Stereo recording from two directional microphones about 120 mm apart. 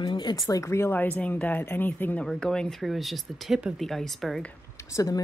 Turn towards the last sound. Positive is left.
turn(degrees=30)  # may be behind; listen again after turning